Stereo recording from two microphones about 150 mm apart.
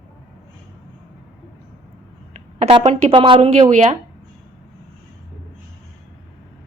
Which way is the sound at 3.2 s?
35° right (ahead or behind).